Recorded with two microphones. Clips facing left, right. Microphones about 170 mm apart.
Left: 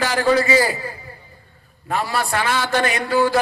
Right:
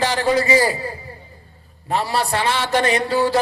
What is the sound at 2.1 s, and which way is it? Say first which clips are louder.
A man's voice: even; 30° right (ahead or behind).